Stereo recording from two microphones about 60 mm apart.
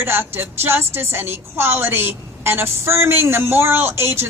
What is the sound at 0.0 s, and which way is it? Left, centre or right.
A woman's voice, right.